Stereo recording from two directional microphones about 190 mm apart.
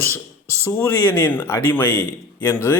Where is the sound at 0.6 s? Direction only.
10° left (ahead or behind).